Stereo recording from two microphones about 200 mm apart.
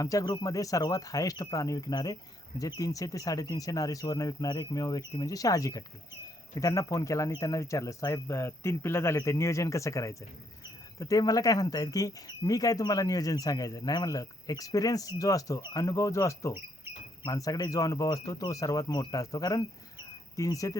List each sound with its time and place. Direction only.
0.0 s speech: 15° left (ahead or behind)